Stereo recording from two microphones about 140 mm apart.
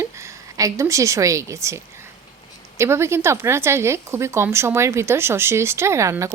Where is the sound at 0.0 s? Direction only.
20° right (ahead or behind).